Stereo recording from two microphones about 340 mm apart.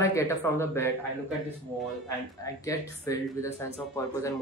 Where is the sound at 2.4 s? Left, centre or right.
Centre.